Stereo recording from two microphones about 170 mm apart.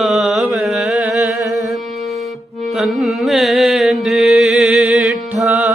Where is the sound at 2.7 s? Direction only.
Centre (ahead or behind).